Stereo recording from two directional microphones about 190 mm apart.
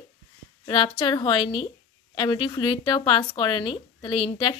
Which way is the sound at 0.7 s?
25° left (ahead or behind).